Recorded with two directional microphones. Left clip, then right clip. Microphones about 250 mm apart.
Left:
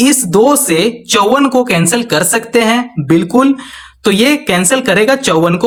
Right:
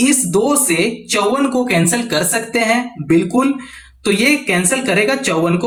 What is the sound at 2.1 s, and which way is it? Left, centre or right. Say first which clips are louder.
Speech: left 8 dB; left.